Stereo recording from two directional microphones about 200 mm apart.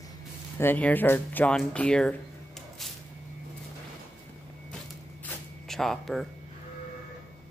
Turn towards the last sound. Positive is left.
turn(degrees=0)  # may be behind; listen again after turning